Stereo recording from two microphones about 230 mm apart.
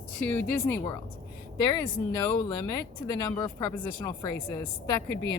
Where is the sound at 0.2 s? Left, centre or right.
Centre.